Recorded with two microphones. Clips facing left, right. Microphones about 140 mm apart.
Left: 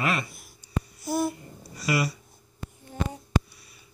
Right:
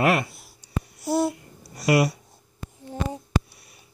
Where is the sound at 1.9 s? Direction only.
60° right (ahead or behind).